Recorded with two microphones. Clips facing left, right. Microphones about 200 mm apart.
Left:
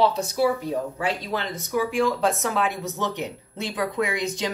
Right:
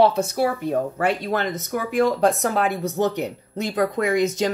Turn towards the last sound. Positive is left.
turn(degrees=-45)  # may be behind; listen again after turning